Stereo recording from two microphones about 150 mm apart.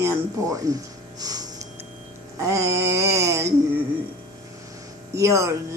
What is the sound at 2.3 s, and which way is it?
Speech, 20° right (ahead or behind).